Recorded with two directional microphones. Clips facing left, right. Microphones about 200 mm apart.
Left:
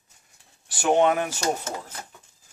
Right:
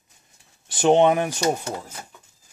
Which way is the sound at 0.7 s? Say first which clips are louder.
Right 4 dB; 20° right (ahead or behind).